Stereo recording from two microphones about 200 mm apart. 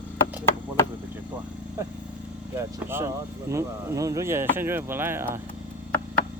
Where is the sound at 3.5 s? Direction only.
15° right (ahead or behind).